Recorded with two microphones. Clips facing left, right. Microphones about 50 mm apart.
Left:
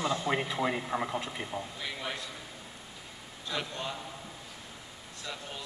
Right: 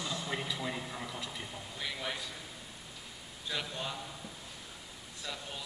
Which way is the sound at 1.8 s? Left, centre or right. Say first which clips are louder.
Left 1 dB; centre.